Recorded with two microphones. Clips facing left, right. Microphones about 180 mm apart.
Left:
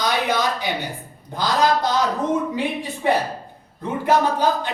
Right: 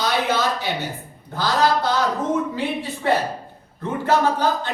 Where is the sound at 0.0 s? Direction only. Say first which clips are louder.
Even; 15° left (ahead or behind).